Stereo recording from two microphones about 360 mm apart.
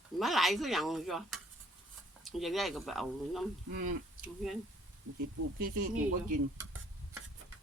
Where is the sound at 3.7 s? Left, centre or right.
Right.